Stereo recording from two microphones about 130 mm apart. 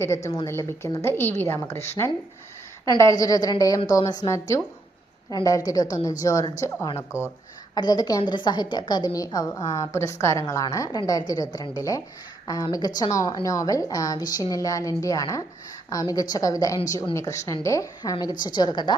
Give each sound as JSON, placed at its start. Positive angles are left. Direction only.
{"t": 0.0, "sound": "a woman's voice", "side_deg": 25}
{"t": 2.8, "sound": "a woman's voice", "side_deg": 25}